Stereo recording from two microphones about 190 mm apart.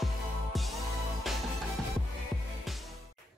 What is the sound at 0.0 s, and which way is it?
Music, centre (ahead or behind).